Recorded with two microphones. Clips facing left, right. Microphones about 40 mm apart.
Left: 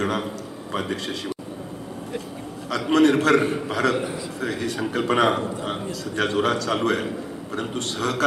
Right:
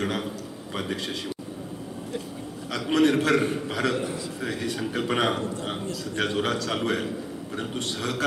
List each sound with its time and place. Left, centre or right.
0.0 s a man's voice: centre
2.6 s a man's voice: centre
3.3 s a man's voice: left; by 8.2 s centre